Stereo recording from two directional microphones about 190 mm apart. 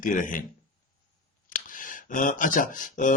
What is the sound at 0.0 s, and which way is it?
Speech, 45° left (ahead or behind).